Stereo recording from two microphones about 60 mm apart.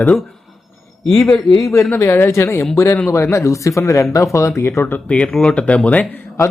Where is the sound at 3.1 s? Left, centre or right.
Left.